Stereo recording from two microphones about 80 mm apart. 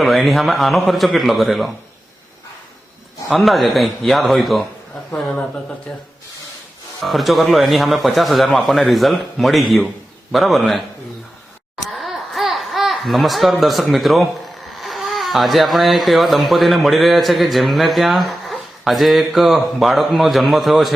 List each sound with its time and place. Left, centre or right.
0.0 s speech: centre
3.2 s speech: centre
5.1 s a woman's voice: centre
7.0 s speech: centre
11.9 s speech: centre